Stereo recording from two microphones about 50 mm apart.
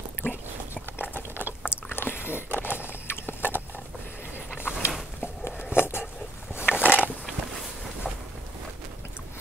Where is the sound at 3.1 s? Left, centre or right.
Left.